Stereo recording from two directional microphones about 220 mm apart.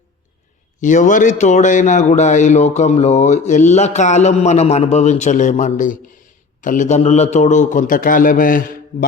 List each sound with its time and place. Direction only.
0.8 s a man's voice: 35° left (ahead or behind)